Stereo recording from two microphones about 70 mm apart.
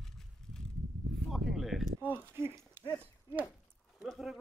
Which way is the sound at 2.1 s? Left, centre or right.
Right.